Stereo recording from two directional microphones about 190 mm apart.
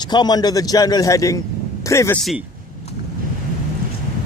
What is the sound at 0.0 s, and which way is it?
A man's voice, 20° left (ahead or behind).